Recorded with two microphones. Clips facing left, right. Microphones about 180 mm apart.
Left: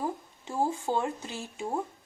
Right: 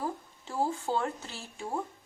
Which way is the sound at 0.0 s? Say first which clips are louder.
Left 2 dB; 15° left (ahead or behind).